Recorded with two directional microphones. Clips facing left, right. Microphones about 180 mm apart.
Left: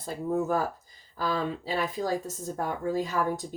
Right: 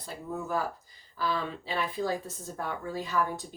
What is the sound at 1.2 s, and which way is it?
Speech, 45° left (ahead or behind).